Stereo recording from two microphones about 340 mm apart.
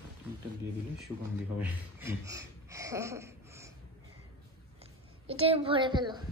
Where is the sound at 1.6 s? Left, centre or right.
Centre.